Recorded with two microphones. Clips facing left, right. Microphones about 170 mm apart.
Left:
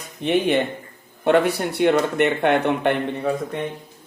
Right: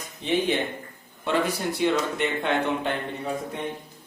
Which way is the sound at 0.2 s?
60° left (ahead or behind).